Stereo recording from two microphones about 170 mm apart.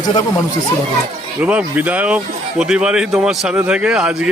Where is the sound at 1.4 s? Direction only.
10° right (ahead or behind).